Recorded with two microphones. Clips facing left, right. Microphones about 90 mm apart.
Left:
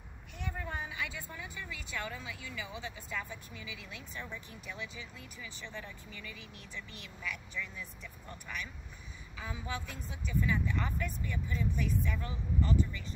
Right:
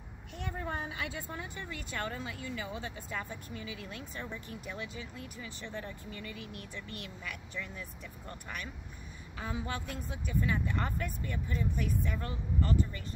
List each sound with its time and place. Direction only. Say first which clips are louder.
0.4 s speech: right 2 dB; 55° right (ahead or behind)